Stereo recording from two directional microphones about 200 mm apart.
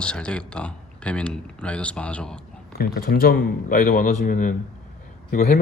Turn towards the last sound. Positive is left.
turn(degrees=50)  # may be behind; listen again after turning